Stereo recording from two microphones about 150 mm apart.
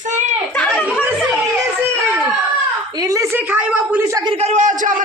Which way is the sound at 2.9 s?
20° right (ahead or behind).